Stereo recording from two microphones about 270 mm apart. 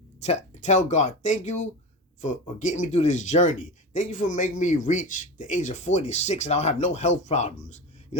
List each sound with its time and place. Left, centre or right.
0.2 s speech: left